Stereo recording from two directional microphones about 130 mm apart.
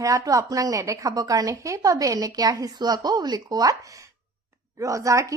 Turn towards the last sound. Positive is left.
turn(degrees=-25)  # may be behind; listen again after turning